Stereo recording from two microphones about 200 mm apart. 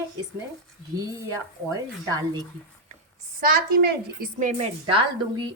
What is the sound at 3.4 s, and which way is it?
A woman's voice, 50° right (ahead or behind).